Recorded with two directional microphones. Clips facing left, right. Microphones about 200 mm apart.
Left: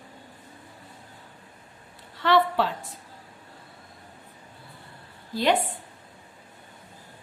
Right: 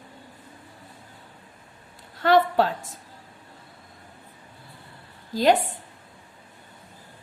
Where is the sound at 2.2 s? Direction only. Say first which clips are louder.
Right 3 dB; 45° right (ahead or behind).